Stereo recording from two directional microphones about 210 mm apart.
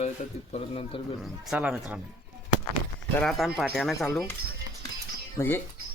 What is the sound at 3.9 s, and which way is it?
Speech, 15° left (ahead or behind).